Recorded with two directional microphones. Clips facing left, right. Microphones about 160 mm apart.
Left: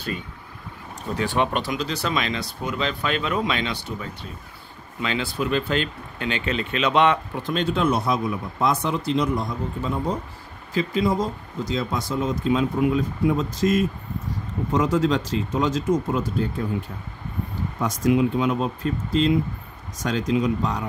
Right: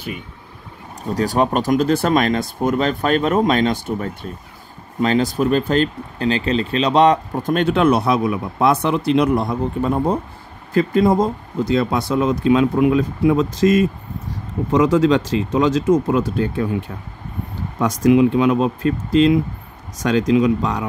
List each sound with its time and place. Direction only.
1.0 s speech: 40° right (ahead or behind); by 16.6 s 80° right
17.7 s speech: 85° right